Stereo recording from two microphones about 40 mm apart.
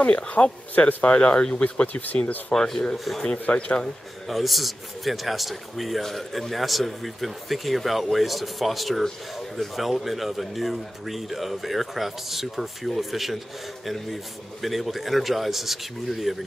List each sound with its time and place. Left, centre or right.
0.0 s speech: left
2.5 s speech: centre
3.4 s speech: left
4.3 s a man's voice: centre